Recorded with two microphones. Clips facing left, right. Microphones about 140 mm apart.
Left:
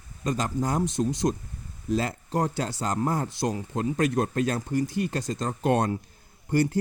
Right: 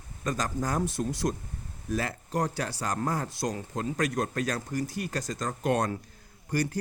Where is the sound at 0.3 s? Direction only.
25° left (ahead or behind).